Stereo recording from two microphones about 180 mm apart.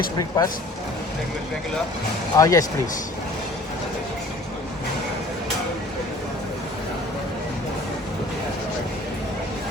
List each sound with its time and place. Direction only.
0.2 s speech: 20° left (ahead or behind)
2.3 s speech: 20° left (ahead or behind)